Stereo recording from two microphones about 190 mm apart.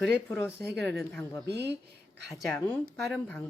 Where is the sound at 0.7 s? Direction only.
10° left (ahead or behind).